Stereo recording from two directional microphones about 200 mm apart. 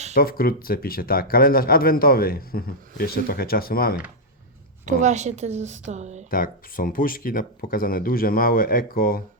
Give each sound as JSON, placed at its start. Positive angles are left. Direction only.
{"t": 0.1, "sound": "speech", "side_deg": 50}
{"t": 4.9, "sound": "a woman's voice", "side_deg": -35}
{"t": 6.3, "sound": "speech", "side_deg": 45}